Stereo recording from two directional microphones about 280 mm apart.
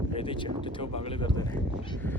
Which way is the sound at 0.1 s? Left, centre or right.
Centre.